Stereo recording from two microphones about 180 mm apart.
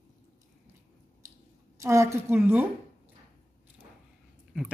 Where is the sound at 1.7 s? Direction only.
15° right (ahead or behind).